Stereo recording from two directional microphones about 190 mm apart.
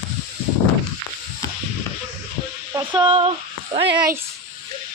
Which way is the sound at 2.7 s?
25° right (ahead or behind).